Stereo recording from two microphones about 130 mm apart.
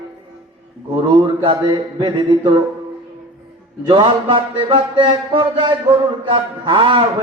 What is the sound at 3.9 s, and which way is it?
Mantra, 35° right (ahead or behind).